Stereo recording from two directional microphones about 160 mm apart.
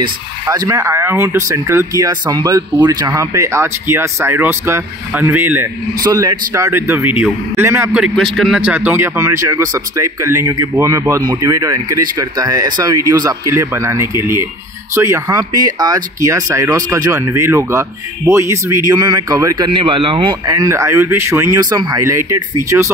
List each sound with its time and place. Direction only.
0.0 s speech: 20° right (ahead or behind)
8.0 s speech: centre (ahead or behind); by 22.9 s 15° right (ahead or behind)